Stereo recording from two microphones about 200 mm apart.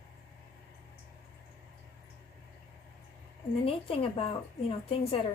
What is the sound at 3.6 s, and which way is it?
Speech, 30° left (ahead or behind).